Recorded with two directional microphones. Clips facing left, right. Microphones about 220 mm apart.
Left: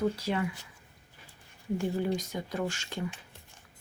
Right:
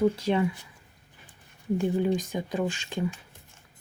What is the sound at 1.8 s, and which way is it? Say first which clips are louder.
Speech: right 5 dB; 15° right (ahead or behind).